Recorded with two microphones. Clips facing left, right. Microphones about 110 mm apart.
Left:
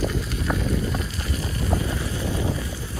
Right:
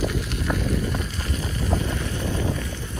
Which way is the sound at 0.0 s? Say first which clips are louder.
Even; 5° right (ahead or behind).